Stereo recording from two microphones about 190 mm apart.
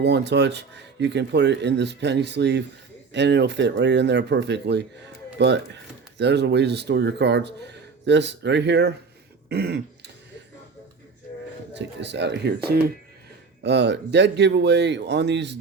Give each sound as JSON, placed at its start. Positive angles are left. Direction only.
{"t": 0.0, "sound": "speech", "side_deg": -65}
{"t": 9.5, "sound": "throat clearing", "side_deg": -55}
{"t": 11.7, "sound": "speech", "side_deg": -65}